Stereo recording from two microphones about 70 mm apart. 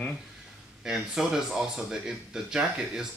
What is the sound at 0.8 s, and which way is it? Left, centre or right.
Speech, centre.